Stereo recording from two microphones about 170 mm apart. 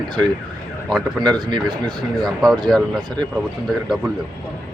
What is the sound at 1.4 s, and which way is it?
Speech, 25° right (ahead or behind).